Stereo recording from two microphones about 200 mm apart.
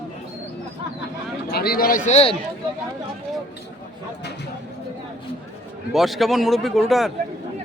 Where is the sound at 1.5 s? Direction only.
50° left (ahead or behind); by 2.3 s 30° left (ahead or behind).